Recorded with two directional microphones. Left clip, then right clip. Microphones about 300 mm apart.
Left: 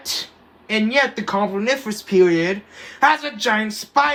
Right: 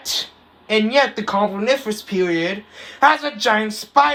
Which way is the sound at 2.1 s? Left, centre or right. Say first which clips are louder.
Left 5 dB; centre.